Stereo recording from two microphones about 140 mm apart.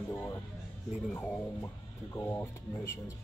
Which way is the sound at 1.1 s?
15° left (ahead or behind).